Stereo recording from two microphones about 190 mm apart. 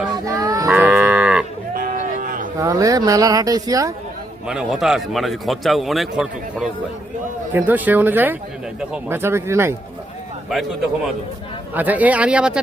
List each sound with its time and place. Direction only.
0.3 s cattle: 20° right (ahead or behind)
0.7 s moo: 10° right (ahead or behind)
1.7 s a sound: 45° right (ahead or behind)
2.6 s speech: 15° right (ahead or behind)
4.4 s a man's voice: 5° right (ahead or behind)
7.7 s speech: 10° right (ahead or behind)
10.5 s a man's voice: centre (ahead or behind)